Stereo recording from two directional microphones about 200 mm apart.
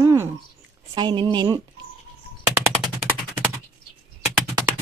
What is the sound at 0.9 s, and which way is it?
Speech, 25° right (ahead or behind).